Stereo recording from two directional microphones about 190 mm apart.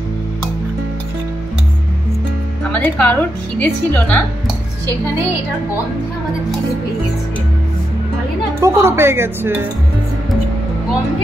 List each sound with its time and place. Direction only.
2.7 s a woman's voice: 10° left (ahead or behind)
8.5 s speech: 15° right (ahead or behind)